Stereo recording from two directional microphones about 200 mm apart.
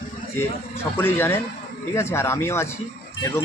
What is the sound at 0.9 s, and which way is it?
Speech, 10° left (ahead or behind).